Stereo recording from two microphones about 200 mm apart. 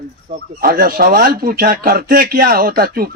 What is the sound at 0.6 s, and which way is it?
Speech, 45° right (ahead or behind).